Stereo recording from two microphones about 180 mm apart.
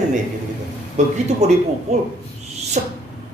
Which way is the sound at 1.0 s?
40° right (ahead or behind).